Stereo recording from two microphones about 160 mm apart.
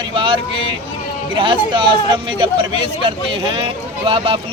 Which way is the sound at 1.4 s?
30° right (ahead or behind).